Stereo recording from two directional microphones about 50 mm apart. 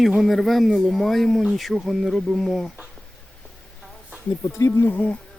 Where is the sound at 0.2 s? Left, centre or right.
Centre.